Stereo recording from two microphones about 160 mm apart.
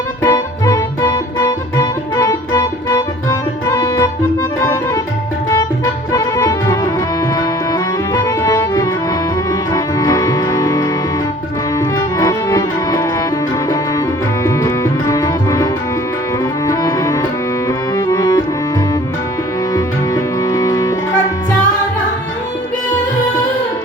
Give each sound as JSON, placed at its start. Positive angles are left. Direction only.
{"t": 0.2, "sound": "music", "side_deg": 20}
{"t": 6.1, "sound": "music", "side_deg": 20}
{"t": 14.4, "sound": "tabla", "side_deg": 20}
{"t": 16.6, "sound": "music", "side_deg": 20}
{"t": 19.7, "sound": "music", "side_deg": 20}